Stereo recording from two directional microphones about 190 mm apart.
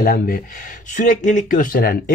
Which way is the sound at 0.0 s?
50° left (ahead or behind).